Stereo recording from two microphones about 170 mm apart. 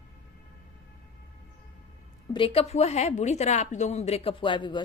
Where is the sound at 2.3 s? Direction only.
35° left (ahead or behind).